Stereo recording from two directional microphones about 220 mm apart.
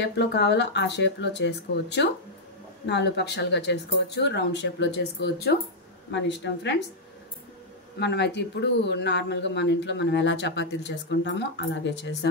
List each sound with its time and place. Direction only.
0.0 s speech: 50° left (ahead or behind)
8.0 s speech: 50° left (ahead or behind)